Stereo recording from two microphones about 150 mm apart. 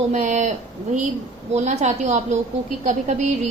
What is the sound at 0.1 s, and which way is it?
Speech, 55° right (ahead or behind).